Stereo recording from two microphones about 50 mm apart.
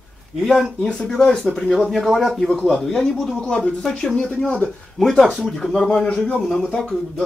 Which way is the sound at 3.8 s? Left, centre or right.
Centre.